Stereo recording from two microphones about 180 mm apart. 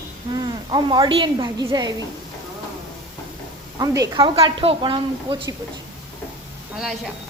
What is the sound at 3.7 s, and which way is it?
A woman's voice, 20° right (ahead or behind).